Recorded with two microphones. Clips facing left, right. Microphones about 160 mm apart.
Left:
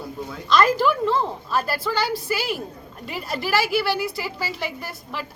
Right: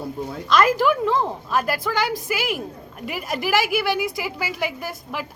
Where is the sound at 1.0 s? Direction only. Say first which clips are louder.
Right 1 dB; 15° right (ahead or behind).